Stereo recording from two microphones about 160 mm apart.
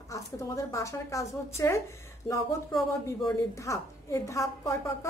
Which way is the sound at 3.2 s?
20° left (ahead or behind).